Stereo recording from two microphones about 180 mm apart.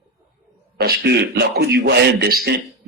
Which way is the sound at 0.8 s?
65° right (ahead or behind).